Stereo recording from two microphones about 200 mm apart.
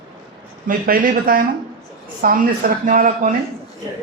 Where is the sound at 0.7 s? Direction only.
45° right (ahead or behind).